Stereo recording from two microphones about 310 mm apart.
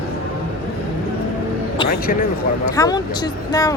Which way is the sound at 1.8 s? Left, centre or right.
Left.